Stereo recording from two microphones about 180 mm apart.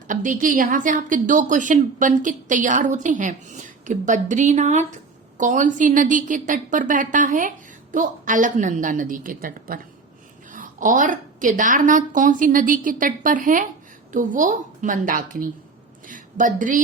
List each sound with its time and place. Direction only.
0.1 s a woman's voice: 45° right (ahead or behind)